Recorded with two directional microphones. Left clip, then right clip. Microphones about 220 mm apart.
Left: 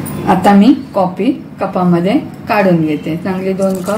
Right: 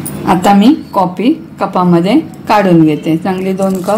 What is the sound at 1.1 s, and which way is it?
A woman's voice, 40° right (ahead or behind).